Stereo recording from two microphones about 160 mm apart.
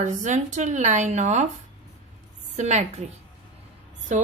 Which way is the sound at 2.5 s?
45° right (ahead or behind).